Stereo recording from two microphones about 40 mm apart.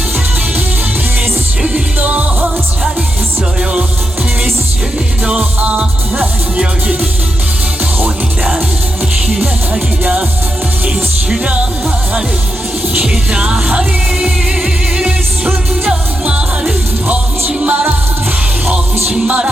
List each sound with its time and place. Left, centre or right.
2.0 s music: right
3.6 s music: right
6.6 s speech: centre
13.4 s music: right
17.6 s music: right